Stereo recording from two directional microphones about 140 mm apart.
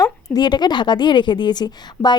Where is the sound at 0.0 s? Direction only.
30° left (ahead or behind).